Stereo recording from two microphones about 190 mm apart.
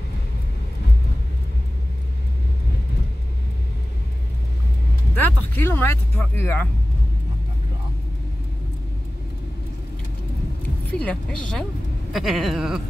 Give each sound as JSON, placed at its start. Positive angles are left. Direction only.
{"t": 5.1, "sound": "speech", "side_deg": 10}
{"t": 11.1, "sound": "speech", "side_deg": 5}